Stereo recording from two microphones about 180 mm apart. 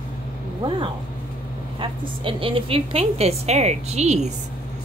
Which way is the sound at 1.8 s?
30° right (ahead or behind).